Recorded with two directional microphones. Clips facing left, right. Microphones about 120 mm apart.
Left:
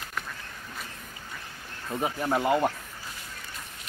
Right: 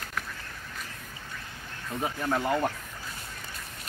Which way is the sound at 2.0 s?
15° left (ahead or behind).